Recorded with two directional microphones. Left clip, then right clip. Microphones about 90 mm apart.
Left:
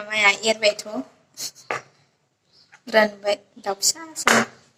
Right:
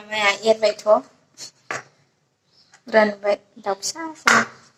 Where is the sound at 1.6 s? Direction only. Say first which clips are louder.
Even; 35° right (ahead or behind).